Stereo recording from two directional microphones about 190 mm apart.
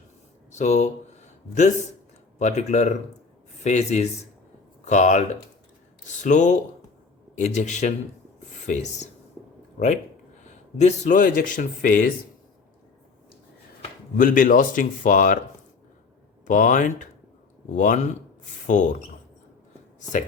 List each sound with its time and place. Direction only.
0.5 s speech: 40° left (ahead or behind)
6.2 s speech: 40° left (ahead or behind)
14.2 s speech: 45° left (ahead or behind)
16.5 s speech: 45° left (ahead or behind)